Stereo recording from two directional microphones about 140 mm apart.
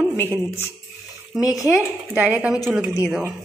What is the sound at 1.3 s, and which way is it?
A woman's voice, centre (ahead or behind).